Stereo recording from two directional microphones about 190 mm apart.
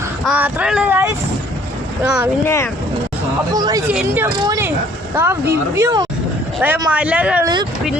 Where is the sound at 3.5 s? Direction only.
20° right (ahead or behind).